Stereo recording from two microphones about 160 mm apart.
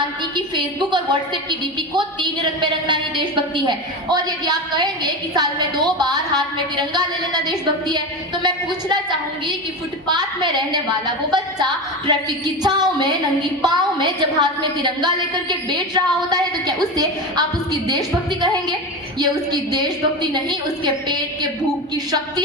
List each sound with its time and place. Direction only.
0.3 s a woman's voice: 30° right (ahead or behind)